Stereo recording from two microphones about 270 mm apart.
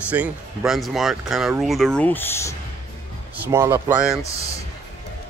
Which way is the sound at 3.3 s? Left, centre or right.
Centre.